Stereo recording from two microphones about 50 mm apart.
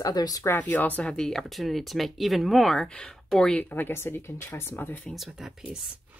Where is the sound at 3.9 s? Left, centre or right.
Left.